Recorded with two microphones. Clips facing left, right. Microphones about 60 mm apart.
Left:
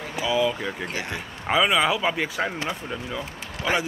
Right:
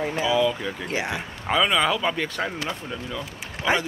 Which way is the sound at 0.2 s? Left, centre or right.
Centre.